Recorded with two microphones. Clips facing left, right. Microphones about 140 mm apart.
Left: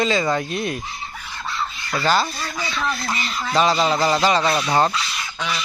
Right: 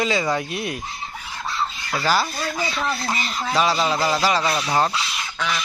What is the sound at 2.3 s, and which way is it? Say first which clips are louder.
Speech: right 2 dB; 35° right (ahead or behind).